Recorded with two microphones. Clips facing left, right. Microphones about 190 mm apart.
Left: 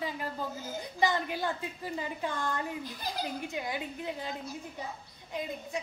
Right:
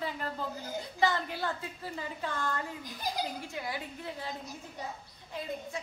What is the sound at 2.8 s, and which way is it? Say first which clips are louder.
Speech: right 1 dB; 15° right (ahead or behind).